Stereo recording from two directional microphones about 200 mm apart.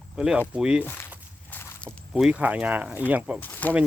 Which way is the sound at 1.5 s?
10° left (ahead or behind).